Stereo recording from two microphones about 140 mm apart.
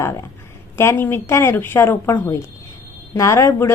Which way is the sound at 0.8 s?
15° left (ahead or behind).